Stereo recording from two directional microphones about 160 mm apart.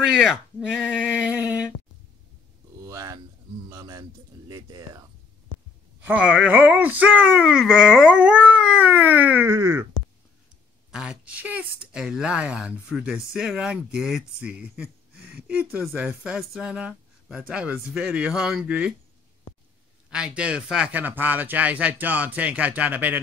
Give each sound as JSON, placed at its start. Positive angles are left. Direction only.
{"t": 0.1, "sound": "speech", "side_deg": -5}
{"t": 2.8, "sound": "a sound", "side_deg": -20}
{"t": 3.7, "sound": "speech", "side_deg": -25}
{"t": 6.0, "sound": "speech", "side_deg": -10}
{"t": 10.9, "sound": "speech", "side_deg": -5}
{"t": 20.1, "sound": "speech", "side_deg": -5}